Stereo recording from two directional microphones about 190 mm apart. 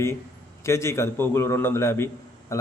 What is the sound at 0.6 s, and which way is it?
A man's voice, 15° left (ahead or behind).